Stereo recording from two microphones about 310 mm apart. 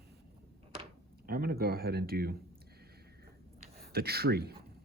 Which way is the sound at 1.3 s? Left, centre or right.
Right.